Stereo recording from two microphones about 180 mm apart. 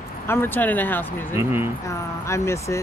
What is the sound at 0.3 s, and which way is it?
Speech, 10° left (ahead or behind).